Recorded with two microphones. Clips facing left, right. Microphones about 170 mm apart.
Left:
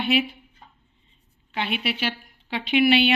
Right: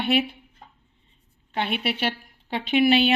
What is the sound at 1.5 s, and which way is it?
A woman's voice, 50° right (ahead or behind).